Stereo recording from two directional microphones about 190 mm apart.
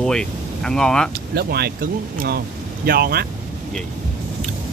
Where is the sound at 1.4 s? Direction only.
55° right (ahead or behind).